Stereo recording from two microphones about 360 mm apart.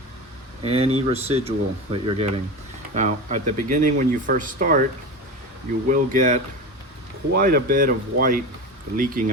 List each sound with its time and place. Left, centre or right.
0.6 s speech: centre
5.9 s speech: right